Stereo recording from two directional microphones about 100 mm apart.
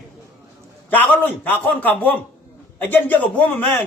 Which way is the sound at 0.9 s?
15° left (ahead or behind).